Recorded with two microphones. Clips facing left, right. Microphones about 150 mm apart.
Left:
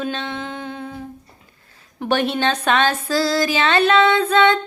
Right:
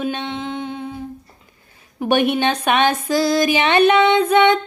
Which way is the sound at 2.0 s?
15° right (ahead or behind).